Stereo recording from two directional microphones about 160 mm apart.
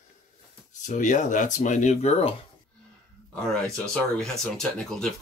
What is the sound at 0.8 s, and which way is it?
Speech, 50° left (ahead or behind).